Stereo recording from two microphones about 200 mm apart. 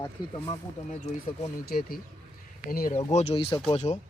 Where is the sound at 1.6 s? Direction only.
50° left (ahead or behind).